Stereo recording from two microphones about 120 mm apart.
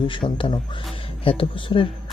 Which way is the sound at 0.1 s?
45° left (ahead or behind).